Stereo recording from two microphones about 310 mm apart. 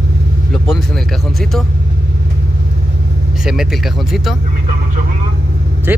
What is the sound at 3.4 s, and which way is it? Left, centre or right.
Speech, centre.